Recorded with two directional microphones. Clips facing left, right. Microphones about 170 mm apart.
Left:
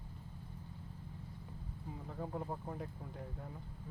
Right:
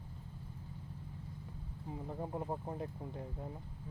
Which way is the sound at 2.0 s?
20° right (ahead or behind).